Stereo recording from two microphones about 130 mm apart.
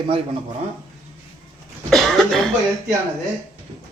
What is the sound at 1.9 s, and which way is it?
Cough, centre (ahead or behind).